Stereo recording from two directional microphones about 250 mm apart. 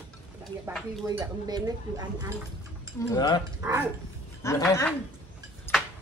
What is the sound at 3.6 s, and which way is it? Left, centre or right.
Speech, centre.